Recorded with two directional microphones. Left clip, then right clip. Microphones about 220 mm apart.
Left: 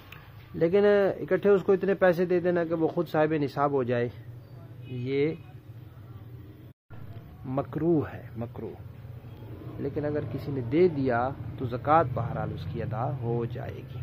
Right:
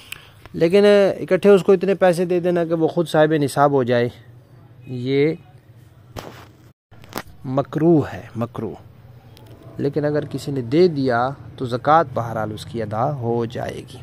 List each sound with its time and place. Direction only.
0.1 s speech: 40° right (ahead or behind)
7.4 s speech: 35° right (ahead or behind)
9.8 s speech: 45° right (ahead or behind)